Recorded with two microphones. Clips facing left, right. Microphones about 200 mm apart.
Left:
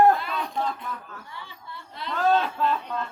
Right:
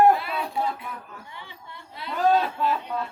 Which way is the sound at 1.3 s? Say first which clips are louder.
Left 1 dB; 15° right (ahead or behind).